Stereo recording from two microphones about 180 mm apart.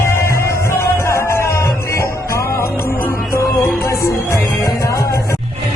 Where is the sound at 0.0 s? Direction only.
15° left (ahead or behind).